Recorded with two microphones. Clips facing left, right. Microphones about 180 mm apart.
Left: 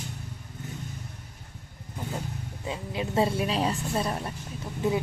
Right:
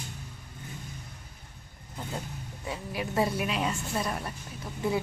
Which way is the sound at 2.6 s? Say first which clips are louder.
Left 2 dB; 20° left (ahead or behind).